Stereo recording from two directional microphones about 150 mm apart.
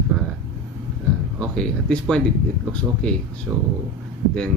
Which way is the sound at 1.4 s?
5° left (ahead or behind).